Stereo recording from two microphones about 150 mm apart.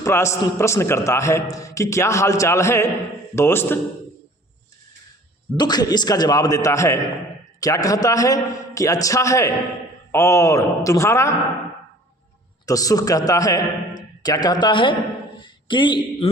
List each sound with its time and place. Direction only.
0.0 s a man's voice: 20° left (ahead or behind)
5.5 s a man's voice: 30° left (ahead or behind)
12.6 s a man's voice: 25° left (ahead or behind)